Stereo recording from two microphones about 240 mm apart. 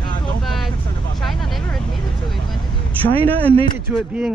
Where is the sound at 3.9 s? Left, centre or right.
Centre.